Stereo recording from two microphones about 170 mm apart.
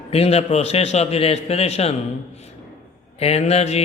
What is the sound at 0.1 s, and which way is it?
A man's voice, 35° left (ahead or behind).